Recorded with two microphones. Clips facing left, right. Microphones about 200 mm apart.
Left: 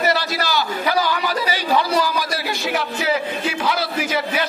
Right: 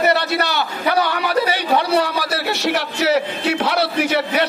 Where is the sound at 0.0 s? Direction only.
65° right (ahead or behind).